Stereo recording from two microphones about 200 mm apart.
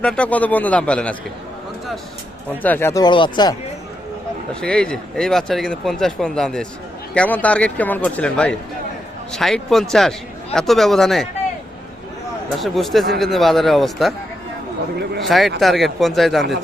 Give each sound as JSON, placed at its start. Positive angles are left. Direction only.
{"t": 0.0, "sound": "speech", "side_deg": 5}
{"t": 2.6, "sound": "speech", "side_deg": 10}
{"t": 4.6, "sound": "speech", "side_deg": 5}
{"t": 12.5, "sound": "speech", "side_deg": 0}
{"t": 15.2, "sound": "speech", "side_deg": 0}